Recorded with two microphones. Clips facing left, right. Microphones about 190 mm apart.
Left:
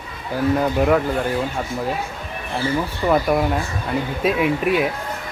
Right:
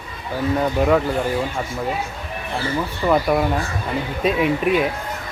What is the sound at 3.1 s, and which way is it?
Speech, centre (ahead or behind).